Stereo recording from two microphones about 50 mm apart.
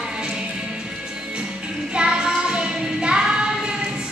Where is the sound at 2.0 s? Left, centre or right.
Centre.